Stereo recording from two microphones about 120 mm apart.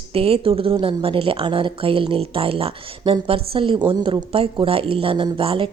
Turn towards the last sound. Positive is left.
turn(degrees=-45)  # may be behind; listen again after turning